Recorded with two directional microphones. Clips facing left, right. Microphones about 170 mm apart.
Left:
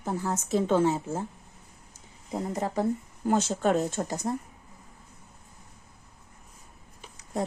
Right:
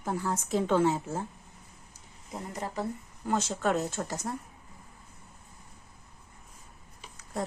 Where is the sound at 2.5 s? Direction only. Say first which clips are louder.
Left 6 dB; 35° left (ahead or behind).